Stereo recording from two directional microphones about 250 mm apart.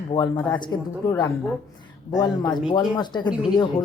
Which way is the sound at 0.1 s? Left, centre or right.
Centre.